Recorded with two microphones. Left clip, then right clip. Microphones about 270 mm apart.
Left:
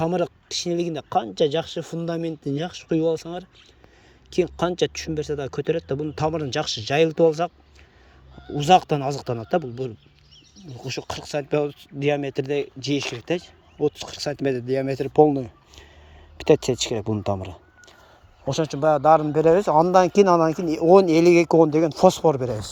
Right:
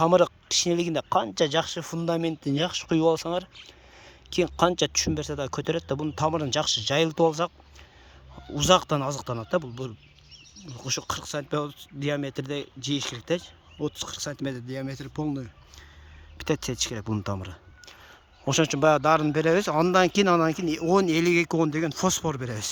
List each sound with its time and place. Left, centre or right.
0.0 s speech: centre
8.5 s speech: centre
17.0 s speech: right
17.4 s a sound: centre
18.4 s speech: centre